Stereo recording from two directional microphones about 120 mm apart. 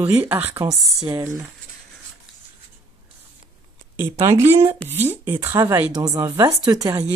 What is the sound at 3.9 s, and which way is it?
Speech, 25° right (ahead or behind).